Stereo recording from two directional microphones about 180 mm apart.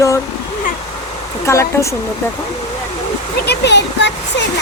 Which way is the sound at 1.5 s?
15° left (ahead or behind).